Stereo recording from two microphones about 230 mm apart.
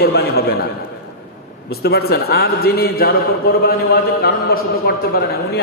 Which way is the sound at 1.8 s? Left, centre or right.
Left.